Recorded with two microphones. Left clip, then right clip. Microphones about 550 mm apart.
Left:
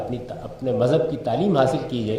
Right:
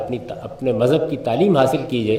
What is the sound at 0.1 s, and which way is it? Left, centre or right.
A man's voice, right.